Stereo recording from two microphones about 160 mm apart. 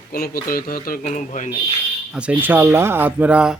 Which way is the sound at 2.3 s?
10° right (ahead or behind).